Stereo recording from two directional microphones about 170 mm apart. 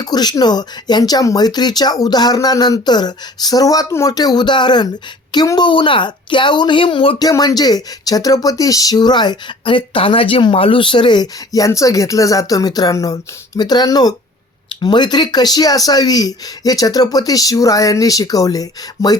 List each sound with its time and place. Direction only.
0.0 s speech: 25° left (ahead or behind)